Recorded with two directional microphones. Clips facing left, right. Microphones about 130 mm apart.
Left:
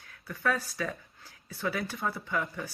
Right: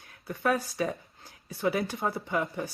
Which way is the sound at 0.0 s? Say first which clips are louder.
Right 2 dB; 25° right (ahead or behind).